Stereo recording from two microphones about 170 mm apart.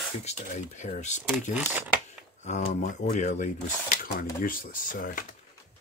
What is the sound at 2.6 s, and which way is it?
Speech, 60° left (ahead or behind).